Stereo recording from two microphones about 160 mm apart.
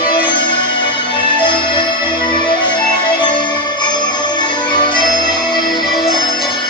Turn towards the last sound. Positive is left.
turn(degrees=25)  # may be behind; listen again after turning